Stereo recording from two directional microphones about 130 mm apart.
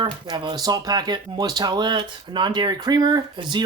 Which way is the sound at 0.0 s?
35° right (ahead or behind).